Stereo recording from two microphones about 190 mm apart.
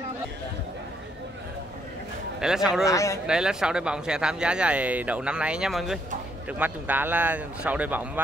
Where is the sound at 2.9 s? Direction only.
15° left (ahead or behind).